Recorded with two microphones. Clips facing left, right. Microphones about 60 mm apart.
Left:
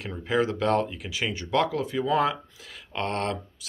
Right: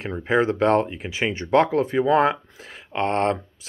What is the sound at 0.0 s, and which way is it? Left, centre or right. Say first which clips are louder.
Speech: right 5 dB; right.